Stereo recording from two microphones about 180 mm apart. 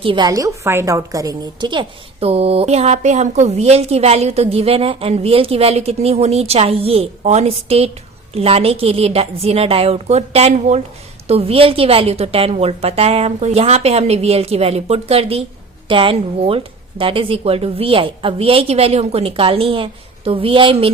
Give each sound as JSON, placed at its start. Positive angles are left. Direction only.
{"t": 0.0, "sound": "a woman's voice", "side_deg": -25}